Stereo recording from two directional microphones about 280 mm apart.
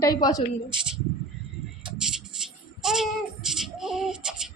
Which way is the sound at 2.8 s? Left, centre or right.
Centre.